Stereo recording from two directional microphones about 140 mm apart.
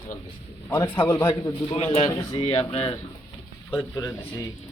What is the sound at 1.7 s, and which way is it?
Speech, 45° left (ahead or behind).